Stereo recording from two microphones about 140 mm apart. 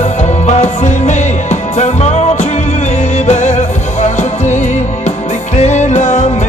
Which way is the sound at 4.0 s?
60° left (ahead or behind).